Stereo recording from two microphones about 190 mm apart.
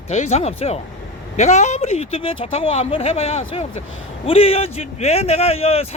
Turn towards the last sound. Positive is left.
turn(degrees=30)  # may be behind; listen again after turning